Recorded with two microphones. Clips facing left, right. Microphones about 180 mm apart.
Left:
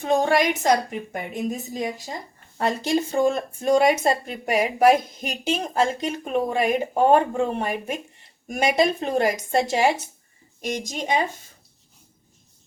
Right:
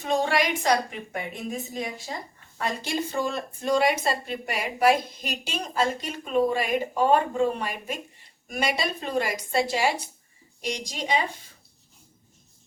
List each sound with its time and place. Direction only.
0.1 s speech: 45° left (ahead or behind)